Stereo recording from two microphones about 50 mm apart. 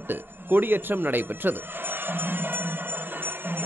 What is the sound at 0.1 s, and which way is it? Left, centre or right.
Speech, right.